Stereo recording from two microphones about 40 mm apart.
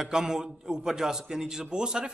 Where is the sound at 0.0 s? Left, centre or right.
Centre.